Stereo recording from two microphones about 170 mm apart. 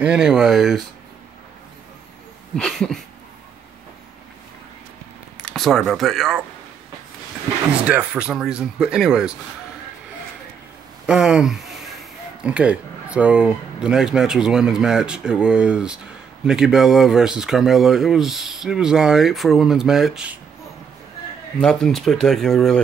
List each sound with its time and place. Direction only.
0.0 s speech: 5° right (ahead or behind)
2.5 s speech: 5° left (ahead or behind)
5.4 s speech: 5° left (ahead or behind)
7.8 s speech: 10° right (ahead or behind)
11.1 s speech: 5° right (ahead or behind)
21.5 s speech: 5° left (ahead or behind)